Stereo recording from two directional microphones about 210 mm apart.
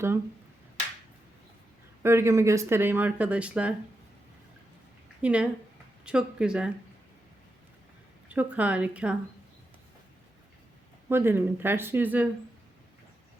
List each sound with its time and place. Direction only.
2.0 s speech: 10° right (ahead or behind)
5.2 s speech: 5° right (ahead or behind)
8.3 s speech: 5° right (ahead or behind)
11.1 s speech: 10° right (ahead or behind)